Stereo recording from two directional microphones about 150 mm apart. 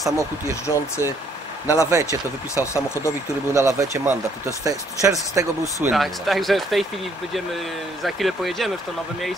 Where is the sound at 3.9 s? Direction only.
15° right (ahead or behind).